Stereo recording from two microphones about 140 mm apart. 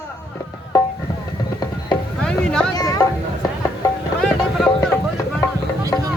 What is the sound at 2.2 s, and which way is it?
Music, 5° left (ahead or behind).